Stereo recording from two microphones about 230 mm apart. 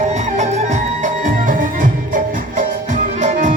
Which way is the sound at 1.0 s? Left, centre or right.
Right.